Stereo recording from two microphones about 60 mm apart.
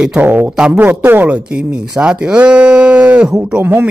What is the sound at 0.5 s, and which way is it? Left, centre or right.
Speech, centre.